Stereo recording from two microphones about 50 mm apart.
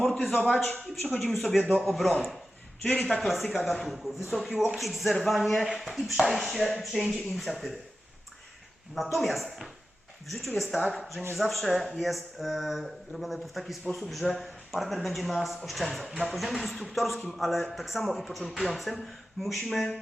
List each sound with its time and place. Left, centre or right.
0.0 s a man's voice: centre
0.7 s speech: left
1.2 s speech: centre
2.8 s speech: left
3.2 s speech: centre
9.1 s speech: centre